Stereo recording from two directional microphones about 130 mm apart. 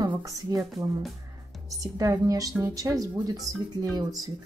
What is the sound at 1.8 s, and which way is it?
Speech, 25° right (ahead or behind).